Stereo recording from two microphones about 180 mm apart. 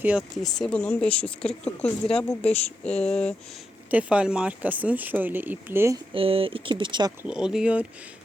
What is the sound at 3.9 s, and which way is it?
Speech, 5° right (ahead or behind).